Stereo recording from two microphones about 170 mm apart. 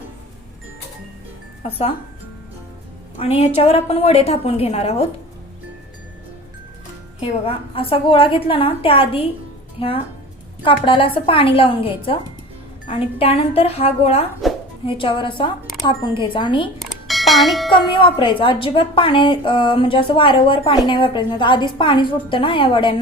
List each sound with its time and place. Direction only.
3.2 s a woman's voice: 35° left (ahead or behind)
7.2 s a woman's voice: 30° left (ahead or behind)
16.7 s bell: centre (ahead or behind)
17.9 s a woman's voice: 30° left (ahead or behind)